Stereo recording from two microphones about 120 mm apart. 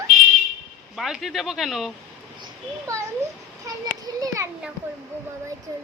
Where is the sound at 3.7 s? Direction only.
25° right (ahead or behind).